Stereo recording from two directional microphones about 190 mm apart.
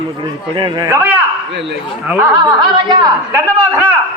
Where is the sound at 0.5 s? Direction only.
25° right (ahead or behind).